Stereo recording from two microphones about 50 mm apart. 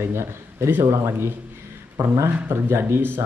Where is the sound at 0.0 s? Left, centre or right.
Right.